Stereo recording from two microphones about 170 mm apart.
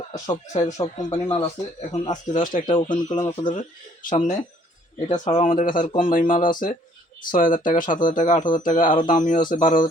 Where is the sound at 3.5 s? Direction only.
50° left (ahead or behind).